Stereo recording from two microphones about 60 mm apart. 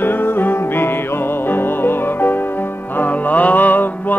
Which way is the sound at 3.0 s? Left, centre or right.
Left.